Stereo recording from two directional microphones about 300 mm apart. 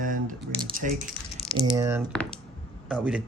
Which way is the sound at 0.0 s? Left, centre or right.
Right.